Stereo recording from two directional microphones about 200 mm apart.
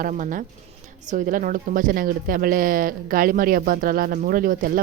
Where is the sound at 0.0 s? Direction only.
40° right (ahead or behind).